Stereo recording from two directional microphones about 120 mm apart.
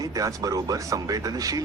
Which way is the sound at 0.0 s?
30° right (ahead or behind).